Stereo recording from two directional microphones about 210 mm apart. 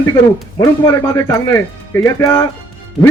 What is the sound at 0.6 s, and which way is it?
Speech, 15° left (ahead or behind).